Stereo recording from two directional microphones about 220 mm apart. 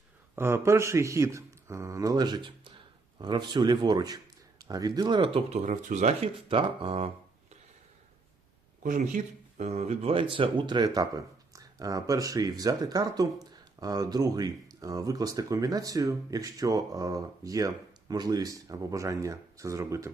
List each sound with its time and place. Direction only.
0.3 s speech: 10° right (ahead or behind)
8.8 s speech: 35° right (ahead or behind); by 20.1 s 15° right (ahead or behind)